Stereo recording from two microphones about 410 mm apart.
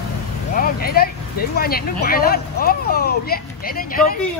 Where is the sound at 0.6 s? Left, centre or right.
Left.